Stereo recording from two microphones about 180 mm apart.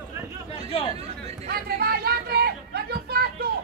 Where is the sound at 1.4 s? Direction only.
60° right (ahead or behind).